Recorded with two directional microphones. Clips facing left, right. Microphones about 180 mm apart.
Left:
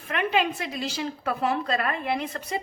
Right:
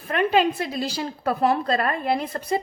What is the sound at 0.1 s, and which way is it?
A woman's voice, 35° right (ahead or behind).